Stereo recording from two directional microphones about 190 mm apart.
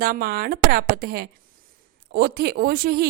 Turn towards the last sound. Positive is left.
turn(degrees=-50)  # may be behind; listen again after turning